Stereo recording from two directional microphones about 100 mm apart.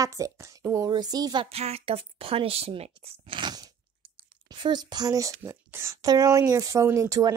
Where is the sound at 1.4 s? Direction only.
90° right.